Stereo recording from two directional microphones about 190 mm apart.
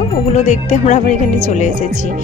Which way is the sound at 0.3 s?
40° left (ahead or behind).